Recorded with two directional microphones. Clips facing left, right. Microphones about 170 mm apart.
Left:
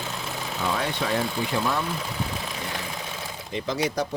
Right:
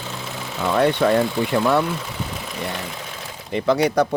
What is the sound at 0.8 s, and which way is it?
Speech, 60° right (ahead or behind).